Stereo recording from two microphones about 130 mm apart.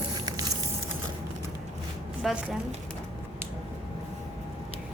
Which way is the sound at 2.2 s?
Centre (ahead or behind).